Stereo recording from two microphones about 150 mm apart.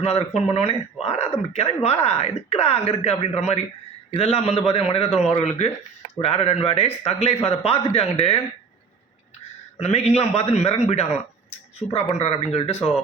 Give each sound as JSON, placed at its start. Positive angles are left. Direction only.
{"t": 0.0, "sound": "a man's voice", "side_deg": 45}
{"t": 9.7, "sound": "speech", "side_deg": 45}